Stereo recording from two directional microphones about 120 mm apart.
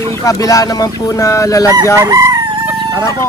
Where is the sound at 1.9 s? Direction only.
25° right (ahead or behind).